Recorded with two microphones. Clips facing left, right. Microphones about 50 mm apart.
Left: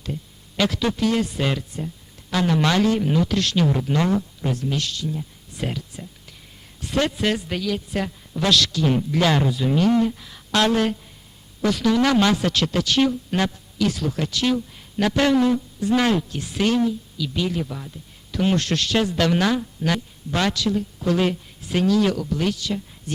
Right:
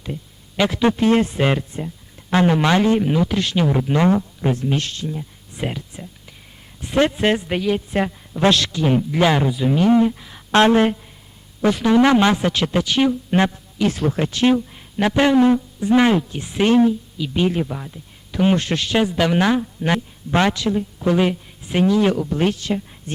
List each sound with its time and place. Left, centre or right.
0.0 s speech: centre
5.1 s a sound: right
6.7 s speech: right